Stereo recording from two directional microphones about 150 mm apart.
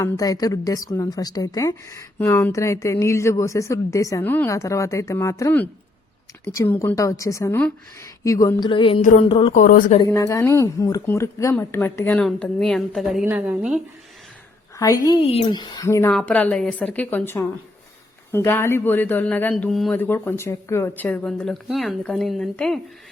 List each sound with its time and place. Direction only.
0.0 s a woman's voice: 25° left (ahead or behind)
8.7 s music: 35° left (ahead or behind)
9.0 s speech: 55° left (ahead or behind)
10.1 s a woman's voice: 20° left (ahead or behind); by 13.8 s 5° right (ahead or behind)
14.8 s a woman's voice: 25° left (ahead or behind)
15.2 s a woman's voice: 35° left (ahead or behind); by 22.8 s 5° left (ahead or behind)